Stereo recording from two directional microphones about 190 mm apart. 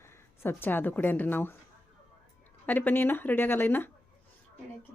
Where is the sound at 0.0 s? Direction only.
10° left (ahead or behind).